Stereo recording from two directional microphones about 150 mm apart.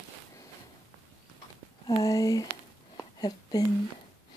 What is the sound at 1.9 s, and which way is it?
Speech, 25° left (ahead or behind).